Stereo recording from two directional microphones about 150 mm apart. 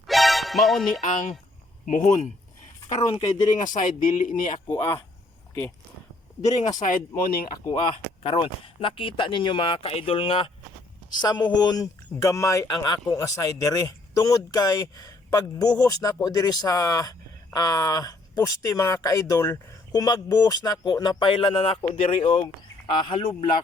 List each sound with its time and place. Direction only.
0.1 s music: centre (ahead or behind)
1.9 s speech: 55° left (ahead or behind)
3.6 s speech: 60° left (ahead or behind)
4.7 s speech: 15° left (ahead or behind)
6.5 s speech: 25° left (ahead or behind)
6.7 s speech: 60° left (ahead or behind)
7.3 s speech: 85° left
7.7 s speech: 35° left (ahead or behind)